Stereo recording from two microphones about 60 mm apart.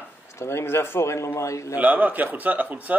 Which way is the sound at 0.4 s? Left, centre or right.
Left.